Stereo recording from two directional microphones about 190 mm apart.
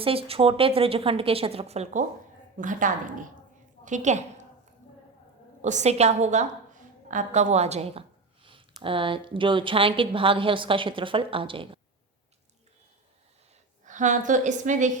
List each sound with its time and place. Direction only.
0.0 s a woman's voice: 30° right (ahead or behind)
5.6 s a woman's voice: 40° right (ahead or behind)
13.8 s a woman's voice: 40° right (ahead or behind)